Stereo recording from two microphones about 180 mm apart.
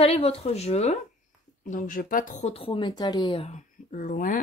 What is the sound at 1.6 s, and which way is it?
A woman's voice, 45° left (ahead or behind).